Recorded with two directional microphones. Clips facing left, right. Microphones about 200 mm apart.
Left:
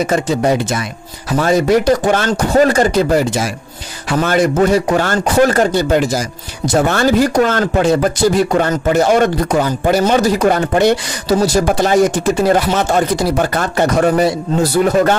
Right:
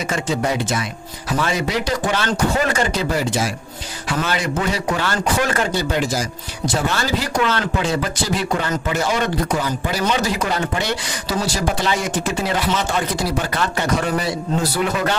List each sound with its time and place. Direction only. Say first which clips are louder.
0.0 s speech: left 7 dB; 40° left (ahead or behind)